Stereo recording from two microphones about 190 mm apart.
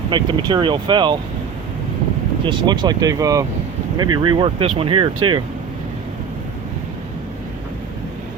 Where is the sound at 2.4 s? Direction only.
25° right (ahead or behind).